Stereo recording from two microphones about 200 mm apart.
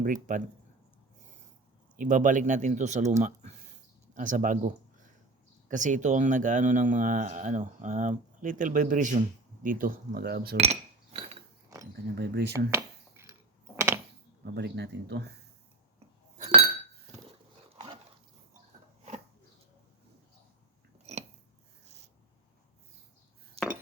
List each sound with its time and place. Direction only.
0.0 s speech: 40° right (ahead or behind)
2.0 s speech: 40° right (ahead or behind)
10.6 s glass: 30° right (ahead or behind)
11.7 s a sound: 15° right (ahead or behind)
12.1 s speech: 55° right (ahead or behind)
12.7 s a sound: 10° right (ahead or behind)
14.4 s speech: 55° right (ahead or behind)
16.4 s chink: 30° right (ahead or behind)
17.7 s dog: 25° right (ahead or behind)
21.8 s rub: 55° right (ahead or behind)
23.6 s chink: 30° right (ahead or behind)